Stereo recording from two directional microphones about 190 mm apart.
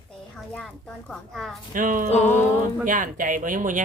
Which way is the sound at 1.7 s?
45° right (ahead or behind).